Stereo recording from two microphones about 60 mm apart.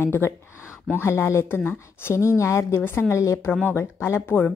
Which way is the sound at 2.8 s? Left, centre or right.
Left.